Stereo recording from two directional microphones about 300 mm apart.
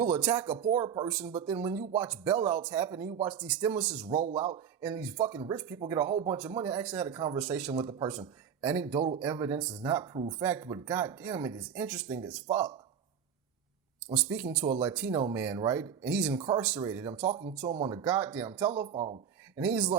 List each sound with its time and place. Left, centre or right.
0.0 s speech: centre
14.1 s speech: centre
18.9 s speech: centre
19.5 s speech: centre